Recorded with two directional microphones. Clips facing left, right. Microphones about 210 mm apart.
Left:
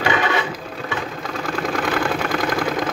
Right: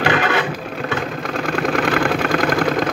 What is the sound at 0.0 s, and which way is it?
Vehicle, 60° right (ahead or behind).